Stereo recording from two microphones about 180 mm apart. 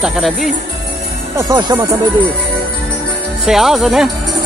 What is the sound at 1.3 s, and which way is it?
Speech, 20° right (ahead or behind).